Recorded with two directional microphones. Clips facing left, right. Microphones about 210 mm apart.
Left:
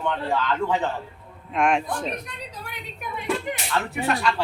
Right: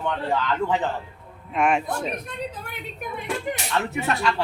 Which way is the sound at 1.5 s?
5° right (ahead or behind).